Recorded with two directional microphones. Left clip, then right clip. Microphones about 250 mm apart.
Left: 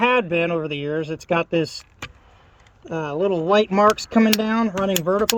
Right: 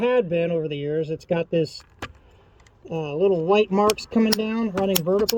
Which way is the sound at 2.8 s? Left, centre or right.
Left.